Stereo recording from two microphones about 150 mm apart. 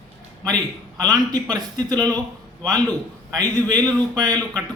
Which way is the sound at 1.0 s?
25° right (ahead or behind).